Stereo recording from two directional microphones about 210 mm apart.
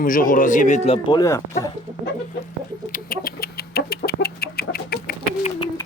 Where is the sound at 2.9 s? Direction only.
40° left (ahead or behind).